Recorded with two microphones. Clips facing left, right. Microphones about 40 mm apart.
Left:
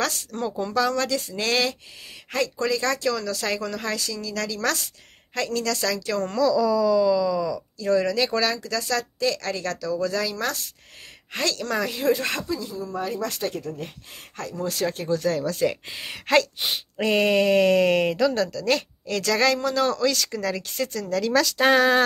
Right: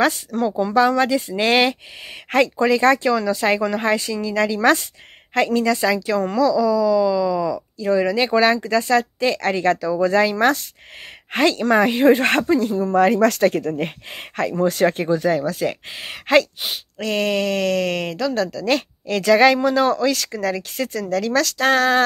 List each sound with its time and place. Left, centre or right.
0.5 s speech: right
3.1 s speech: right
15.0 s speech: right
17.0 s speech: centre